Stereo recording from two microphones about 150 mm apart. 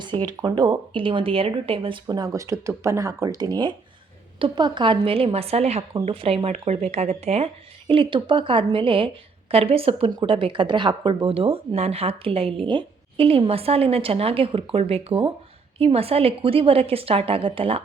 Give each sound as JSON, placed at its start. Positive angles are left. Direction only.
{"t": 0.3, "sound": "speech", "side_deg": -30}